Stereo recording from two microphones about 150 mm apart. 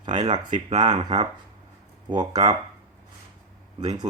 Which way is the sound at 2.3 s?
45° right (ahead or behind).